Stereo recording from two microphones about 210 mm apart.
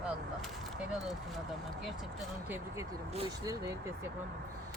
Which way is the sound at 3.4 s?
15° right (ahead or behind).